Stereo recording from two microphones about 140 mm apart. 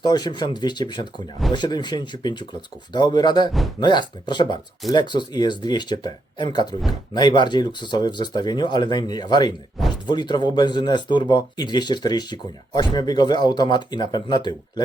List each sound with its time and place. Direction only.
0.0 s speech: 30° left (ahead or behind)